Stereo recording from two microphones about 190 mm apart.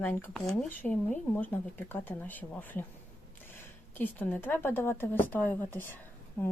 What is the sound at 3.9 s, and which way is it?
Speech, 10° left (ahead or behind).